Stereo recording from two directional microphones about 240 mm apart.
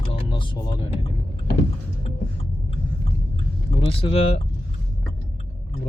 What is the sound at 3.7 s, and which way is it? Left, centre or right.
Speech, left.